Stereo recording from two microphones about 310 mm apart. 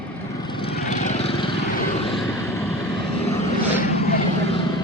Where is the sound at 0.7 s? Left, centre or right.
Left.